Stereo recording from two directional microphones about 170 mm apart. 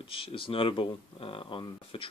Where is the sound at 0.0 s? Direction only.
30° left (ahead or behind).